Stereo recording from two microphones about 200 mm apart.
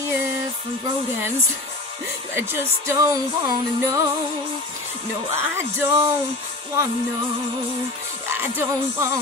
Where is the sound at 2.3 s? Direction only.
15° right (ahead or behind).